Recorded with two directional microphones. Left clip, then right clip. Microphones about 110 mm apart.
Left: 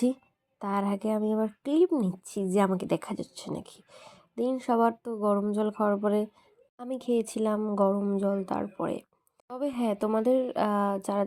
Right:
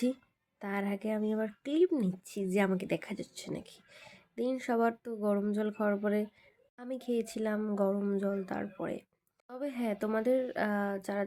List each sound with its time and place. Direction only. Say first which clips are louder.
0.6 s speech: left 6 dB; 35° left (ahead or behind)
6.7 s speech: left 6 dB; 40° left (ahead or behind)
9.5 s speech: left 6 dB; 40° left (ahead or behind)